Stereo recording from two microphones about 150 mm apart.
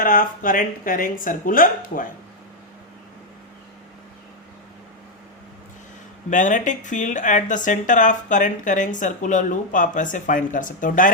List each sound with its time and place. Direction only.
0.0 s speech: 65° left (ahead or behind)
6.3 s speech: 55° left (ahead or behind)